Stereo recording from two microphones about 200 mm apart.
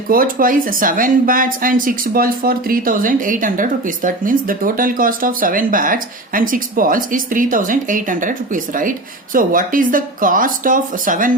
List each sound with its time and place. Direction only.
0.1 s speech: 45° right (ahead or behind)